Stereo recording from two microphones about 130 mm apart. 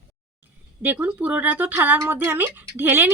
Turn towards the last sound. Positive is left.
turn(degrees=-15)  # may be behind; listen again after turning